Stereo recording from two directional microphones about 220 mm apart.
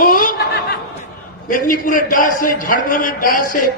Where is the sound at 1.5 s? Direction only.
40° left (ahead or behind).